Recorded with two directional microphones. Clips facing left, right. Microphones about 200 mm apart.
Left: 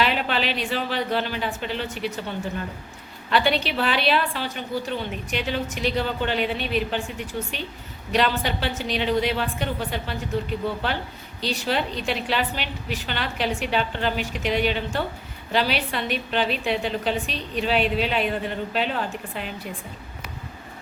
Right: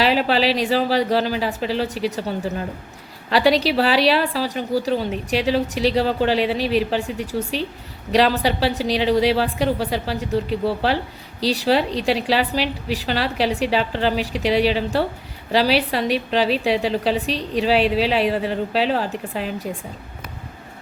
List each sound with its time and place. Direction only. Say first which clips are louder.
0.0 s a woman's voice: right 6 dB; 35° right (ahead or behind)